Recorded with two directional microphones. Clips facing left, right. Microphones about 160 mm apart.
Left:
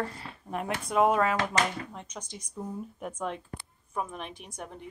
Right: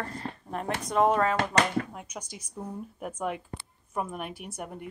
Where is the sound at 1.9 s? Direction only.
10° right (ahead or behind).